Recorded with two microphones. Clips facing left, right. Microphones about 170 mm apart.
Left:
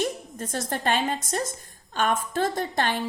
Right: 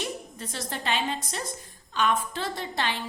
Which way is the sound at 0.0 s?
50° left (ahead or behind).